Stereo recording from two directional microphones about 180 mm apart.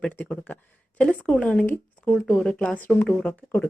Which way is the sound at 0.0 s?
5° left (ahead or behind).